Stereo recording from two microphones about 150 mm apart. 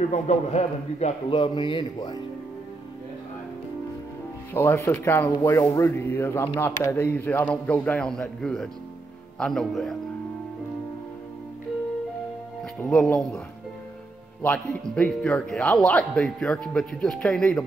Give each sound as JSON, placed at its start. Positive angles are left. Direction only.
{"t": 0.1, "sound": "a man's voice", "side_deg": 45}
{"t": 4.6, "sound": "a man's voice", "side_deg": 15}
{"t": 12.9, "sound": "a man's voice", "side_deg": 5}
{"t": 14.4, "sound": "speech", "side_deg": 10}